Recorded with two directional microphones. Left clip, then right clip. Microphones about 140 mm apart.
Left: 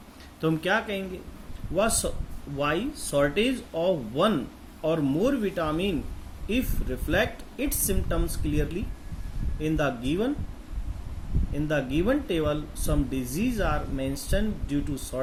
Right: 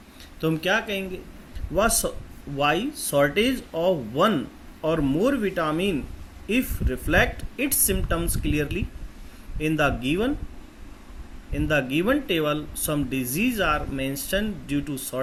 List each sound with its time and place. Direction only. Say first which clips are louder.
0.4 s speech: right 2 dB; 25° right (ahead or behind)
11.5 s speech: right 4 dB; 30° right (ahead or behind)